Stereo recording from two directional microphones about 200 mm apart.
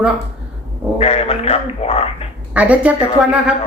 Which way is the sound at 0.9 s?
30° left (ahead or behind).